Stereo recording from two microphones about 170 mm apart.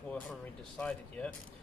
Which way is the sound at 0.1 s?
10° left (ahead or behind).